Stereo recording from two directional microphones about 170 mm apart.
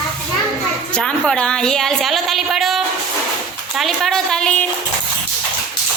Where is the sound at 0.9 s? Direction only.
5° left (ahead or behind).